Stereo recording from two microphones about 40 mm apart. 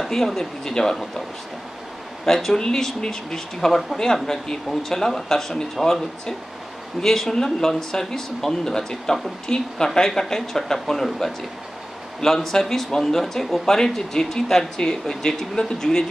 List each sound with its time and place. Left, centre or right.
0.1 s speech: centre
2.2 s speech: centre
12.3 s speech: centre